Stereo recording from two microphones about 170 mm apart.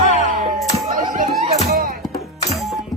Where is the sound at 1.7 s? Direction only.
60° right (ahead or behind).